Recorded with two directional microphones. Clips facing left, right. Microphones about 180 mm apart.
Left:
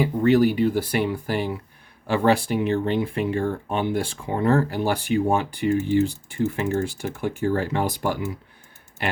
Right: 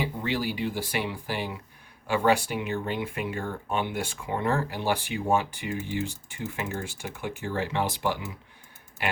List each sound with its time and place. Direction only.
0.0 s speech: 45° left (ahead or behind)
2.1 s speech: 35° left (ahead or behind)